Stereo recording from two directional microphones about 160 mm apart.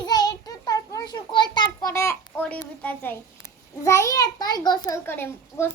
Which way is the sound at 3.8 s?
20° left (ahead or behind).